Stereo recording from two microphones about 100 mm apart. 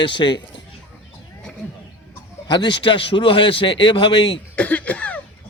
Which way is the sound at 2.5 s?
55° left (ahead or behind).